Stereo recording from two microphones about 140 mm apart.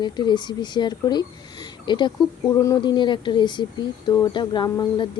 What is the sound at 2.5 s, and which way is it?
Speech, 20° left (ahead or behind).